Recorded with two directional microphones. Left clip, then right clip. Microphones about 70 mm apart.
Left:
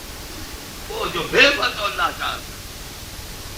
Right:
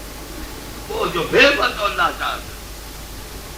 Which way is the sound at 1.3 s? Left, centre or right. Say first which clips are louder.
Right 1 dB; right.